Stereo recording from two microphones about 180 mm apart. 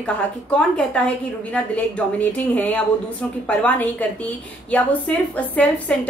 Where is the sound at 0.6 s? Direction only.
5° left (ahead or behind).